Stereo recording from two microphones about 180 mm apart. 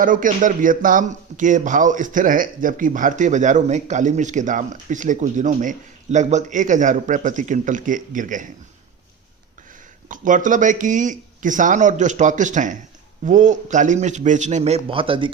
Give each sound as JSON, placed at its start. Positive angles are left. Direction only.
{"t": 0.0, "sound": "a man's voice", "side_deg": -50}
{"t": 10.1, "sound": "a man's voice", "side_deg": -45}